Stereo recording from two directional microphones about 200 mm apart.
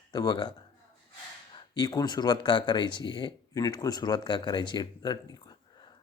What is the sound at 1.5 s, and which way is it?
Speech, 20° left (ahead or behind).